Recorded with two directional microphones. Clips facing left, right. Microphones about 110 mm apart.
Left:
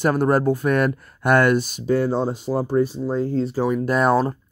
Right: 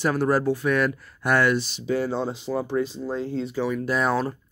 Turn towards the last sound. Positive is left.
turn(degrees=50)  # may be behind; listen again after turning